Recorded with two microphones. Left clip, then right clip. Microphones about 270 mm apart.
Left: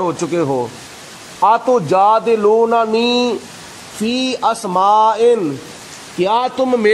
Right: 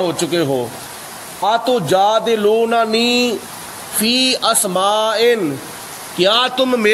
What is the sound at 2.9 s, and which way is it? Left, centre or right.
A man's voice, centre.